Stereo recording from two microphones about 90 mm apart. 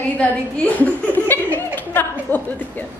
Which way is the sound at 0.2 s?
15° left (ahead or behind).